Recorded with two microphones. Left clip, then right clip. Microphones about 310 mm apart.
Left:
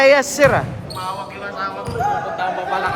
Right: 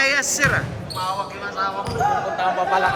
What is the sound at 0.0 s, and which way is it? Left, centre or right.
Speech, centre.